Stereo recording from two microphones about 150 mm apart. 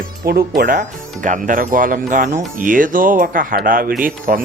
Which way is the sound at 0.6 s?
65° right (ahead or behind).